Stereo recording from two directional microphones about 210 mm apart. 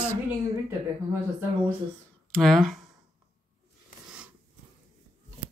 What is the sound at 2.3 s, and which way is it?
Speech, centre (ahead or behind).